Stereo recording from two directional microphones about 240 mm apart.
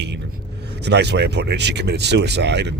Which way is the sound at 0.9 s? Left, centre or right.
Right.